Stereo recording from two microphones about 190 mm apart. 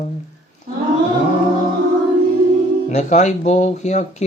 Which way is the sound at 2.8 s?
35° left (ahead or behind).